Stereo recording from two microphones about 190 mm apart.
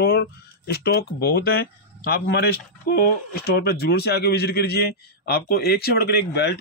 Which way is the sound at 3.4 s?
55° left (ahead or behind).